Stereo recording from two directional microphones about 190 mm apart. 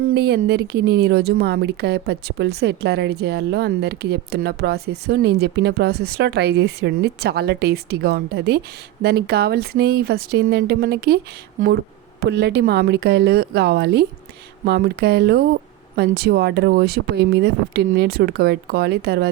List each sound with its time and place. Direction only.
0.0 s speech: 60° right (ahead or behind)
12.2 s speech: 60° right (ahead or behind)